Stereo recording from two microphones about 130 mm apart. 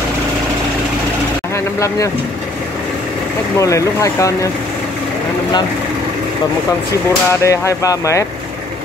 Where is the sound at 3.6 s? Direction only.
25° left (ahead or behind).